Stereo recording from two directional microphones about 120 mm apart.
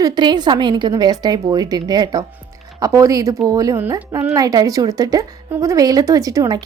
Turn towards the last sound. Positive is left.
turn(degrees=-30)  # may be behind; listen again after turning